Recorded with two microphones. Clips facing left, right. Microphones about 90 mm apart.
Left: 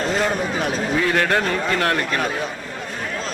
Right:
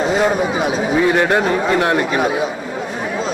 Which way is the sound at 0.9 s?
20° right (ahead or behind).